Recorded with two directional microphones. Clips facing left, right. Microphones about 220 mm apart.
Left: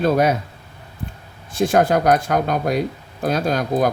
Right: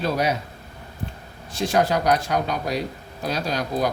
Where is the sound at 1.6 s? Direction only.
50° left (ahead or behind).